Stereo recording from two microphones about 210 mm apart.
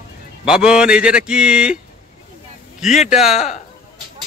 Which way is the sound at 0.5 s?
5° right (ahead or behind).